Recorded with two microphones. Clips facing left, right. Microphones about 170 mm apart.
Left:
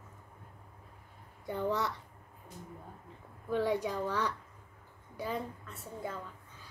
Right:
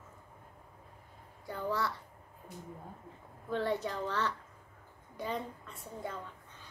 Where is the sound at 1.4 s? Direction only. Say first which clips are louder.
Left 2 dB; 20° left (ahead or behind).